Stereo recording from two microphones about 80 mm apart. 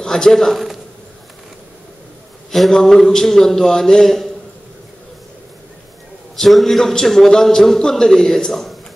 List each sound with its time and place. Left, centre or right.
0.0 s a man's voice: centre
2.5 s a man's voice: centre
6.3 s a man's voice: centre